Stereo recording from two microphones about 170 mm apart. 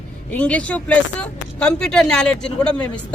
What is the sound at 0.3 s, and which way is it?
Speech, 5° left (ahead or behind).